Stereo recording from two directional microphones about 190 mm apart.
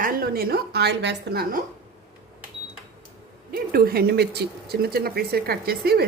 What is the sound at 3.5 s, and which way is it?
Speech, 55° right (ahead or behind).